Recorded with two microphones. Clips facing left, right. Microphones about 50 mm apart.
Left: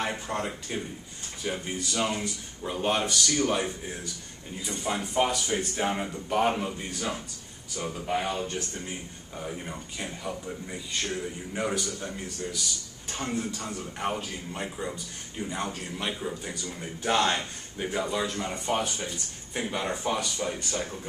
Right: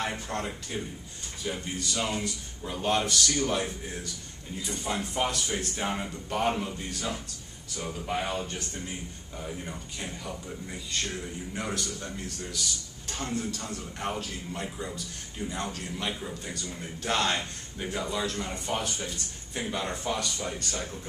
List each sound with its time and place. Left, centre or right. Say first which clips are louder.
0.0 s a man's voice: left 2 dB; centre
9.4 s a man's voice: left 2 dB; centre
17.3 s a man's voice: left 1 dB; centre